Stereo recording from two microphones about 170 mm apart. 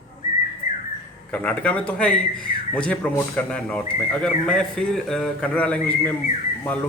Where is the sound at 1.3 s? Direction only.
10° left (ahead or behind).